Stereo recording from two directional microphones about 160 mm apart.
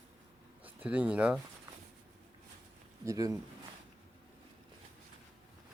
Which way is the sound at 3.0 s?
20° right (ahead or behind).